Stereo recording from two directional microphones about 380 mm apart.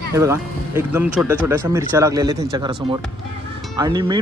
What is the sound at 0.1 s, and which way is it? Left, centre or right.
Speech, centre.